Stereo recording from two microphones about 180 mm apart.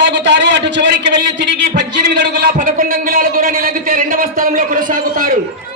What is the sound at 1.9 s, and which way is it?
A man's voice, 65° right (ahead or behind).